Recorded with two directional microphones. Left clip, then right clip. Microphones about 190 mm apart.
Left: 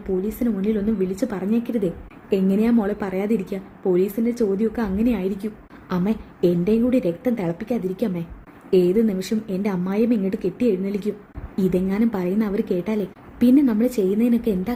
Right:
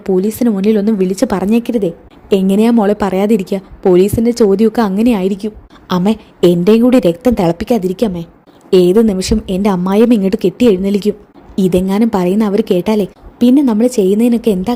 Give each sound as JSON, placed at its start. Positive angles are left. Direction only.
{"t": 0.0, "sound": "a woman's voice", "side_deg": -40}